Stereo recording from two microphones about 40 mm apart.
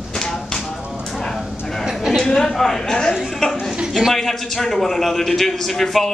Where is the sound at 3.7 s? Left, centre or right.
Centre.